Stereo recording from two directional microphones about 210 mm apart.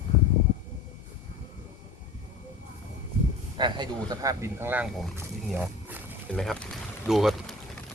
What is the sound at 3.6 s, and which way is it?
Speech, 20° right (ahead or behind).